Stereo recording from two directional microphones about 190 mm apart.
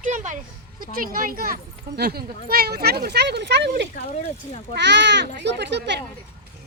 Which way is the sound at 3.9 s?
35° left (ahead or behind).